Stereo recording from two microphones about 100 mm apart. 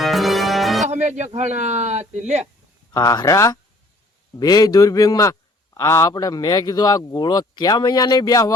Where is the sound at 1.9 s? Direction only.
90° right.